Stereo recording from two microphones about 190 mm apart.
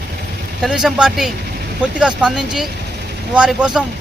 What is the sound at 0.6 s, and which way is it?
Speech, centre (ahead or behind).